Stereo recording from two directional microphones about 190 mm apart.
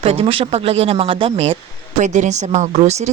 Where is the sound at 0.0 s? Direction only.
30° right (ahead or behind).